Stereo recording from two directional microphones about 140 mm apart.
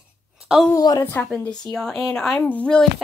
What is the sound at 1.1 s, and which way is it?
A woman's voice, 5° left (ahead or behind).